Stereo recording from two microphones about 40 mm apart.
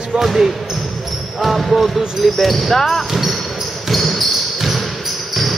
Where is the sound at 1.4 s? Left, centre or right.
Centre.